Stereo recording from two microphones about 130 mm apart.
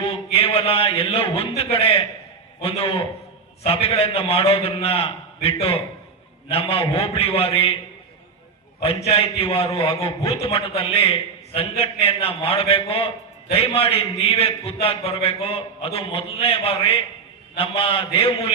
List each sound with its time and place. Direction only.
0.0 s a man's voice: 45° left (ahead or behind)
8.8 s a man's voice: 50° left (ahead or behind)